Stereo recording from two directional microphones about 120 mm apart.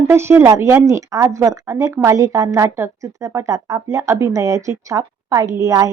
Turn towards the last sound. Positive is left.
turn(degrees=-30)  # may be behind; listen again after turning